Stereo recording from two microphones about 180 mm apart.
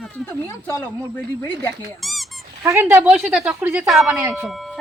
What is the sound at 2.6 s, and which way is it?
Speech, 10° right (ahead or behind).